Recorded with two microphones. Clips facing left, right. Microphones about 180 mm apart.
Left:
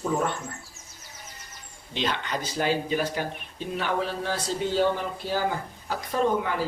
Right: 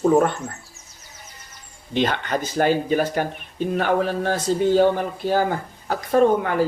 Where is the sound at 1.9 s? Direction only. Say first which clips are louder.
Right 7 dB; 55° right (ahead or behind).